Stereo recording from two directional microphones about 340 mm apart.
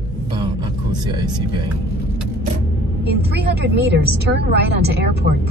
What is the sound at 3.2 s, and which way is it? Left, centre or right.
A woman's voice, right.